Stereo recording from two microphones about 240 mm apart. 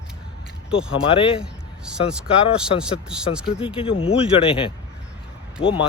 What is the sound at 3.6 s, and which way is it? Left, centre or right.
Speech, left.